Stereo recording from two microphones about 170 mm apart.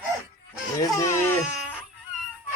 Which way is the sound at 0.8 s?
20° left (ahead or behind).